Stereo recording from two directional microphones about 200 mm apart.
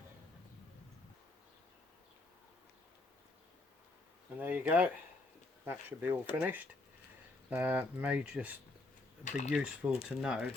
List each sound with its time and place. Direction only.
4.4 s speech: 10° right (ahead or behind)